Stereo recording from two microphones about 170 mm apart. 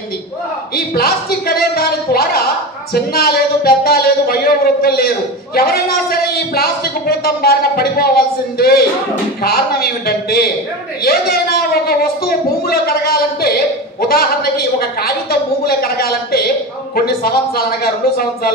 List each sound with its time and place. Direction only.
0.7 s a sound: 65° left (ahead or behind)
2.9 s speech: 65° left (ahead or behind)
15.6 s speech: 65° left (ahead or behind)